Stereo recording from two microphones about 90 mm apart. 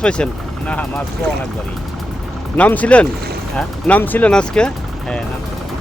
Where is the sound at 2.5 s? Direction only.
15° left (ahead or behind).